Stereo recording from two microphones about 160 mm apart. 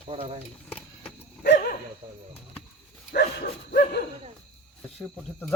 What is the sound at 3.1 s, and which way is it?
Dog, 70° left (ahead or behind).